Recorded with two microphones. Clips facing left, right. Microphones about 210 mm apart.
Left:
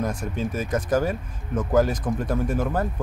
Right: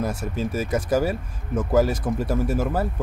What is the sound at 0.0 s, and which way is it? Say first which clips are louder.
Speech: right 1 dB; 5° right (ahead or behind).